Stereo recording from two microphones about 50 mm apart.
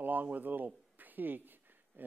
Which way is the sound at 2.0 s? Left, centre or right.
Right.